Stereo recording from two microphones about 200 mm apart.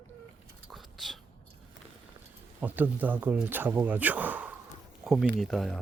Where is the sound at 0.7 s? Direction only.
Centre (ahead or behind).